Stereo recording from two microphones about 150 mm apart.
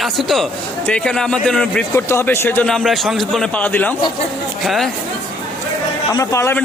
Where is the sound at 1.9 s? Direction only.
15° left (ahead or behind).